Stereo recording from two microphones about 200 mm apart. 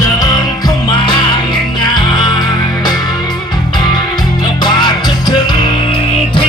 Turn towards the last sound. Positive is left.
turn(degrees=25)  # may be behind; listen again after turning